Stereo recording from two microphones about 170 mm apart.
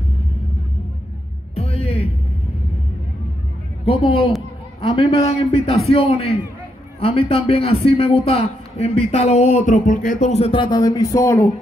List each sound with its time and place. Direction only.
1.5 s music: 35° left (ahead or behind)
3.8 s speech: 30° left (ahead or behind)